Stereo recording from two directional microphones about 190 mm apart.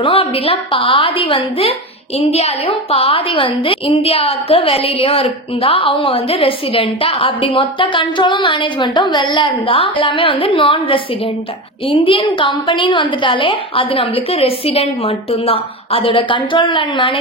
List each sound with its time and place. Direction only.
0.0 s a woman's voice: 30° left (ahead or behind)